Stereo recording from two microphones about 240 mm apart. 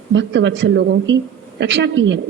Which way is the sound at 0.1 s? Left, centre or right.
Right.